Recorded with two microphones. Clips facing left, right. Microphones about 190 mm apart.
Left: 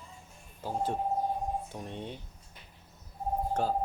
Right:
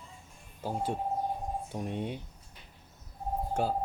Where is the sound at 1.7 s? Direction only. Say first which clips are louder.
Right 5 dB; 10° right (ahead or behind).